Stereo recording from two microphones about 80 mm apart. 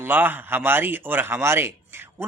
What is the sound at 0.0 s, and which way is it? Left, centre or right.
Speech, right.